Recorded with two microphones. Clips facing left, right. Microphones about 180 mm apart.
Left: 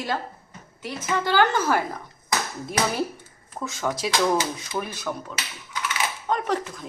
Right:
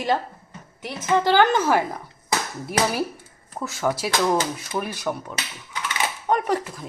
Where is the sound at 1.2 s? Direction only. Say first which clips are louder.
Right 1 dB; 15° right (ahead or behind).